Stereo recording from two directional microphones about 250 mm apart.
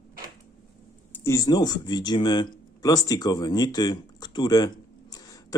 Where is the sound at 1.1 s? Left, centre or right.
Centre.